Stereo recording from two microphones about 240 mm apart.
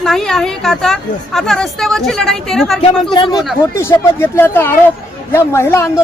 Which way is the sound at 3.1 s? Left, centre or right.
Centre.